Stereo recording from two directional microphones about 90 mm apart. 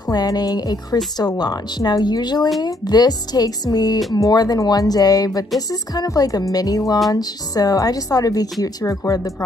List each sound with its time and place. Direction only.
0.1 s a woman's voice: 45° left (ahead or behind)